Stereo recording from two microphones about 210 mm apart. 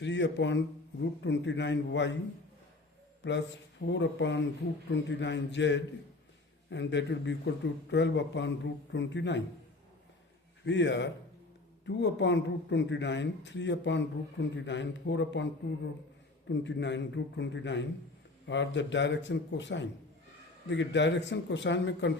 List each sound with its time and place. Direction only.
0.0 s speech: 55° left (ahead or behind)
3.2 s speech: 55° left (ahead or behind)
10.7 s speech: 55° left (ahead or behind)
16.5 s speech: 55° left (ahead or behind)